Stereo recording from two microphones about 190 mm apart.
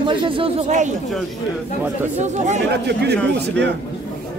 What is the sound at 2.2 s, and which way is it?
Speech, 40° right (ahead or behind).